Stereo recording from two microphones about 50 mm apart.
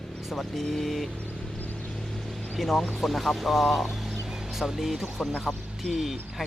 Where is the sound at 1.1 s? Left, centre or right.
Left.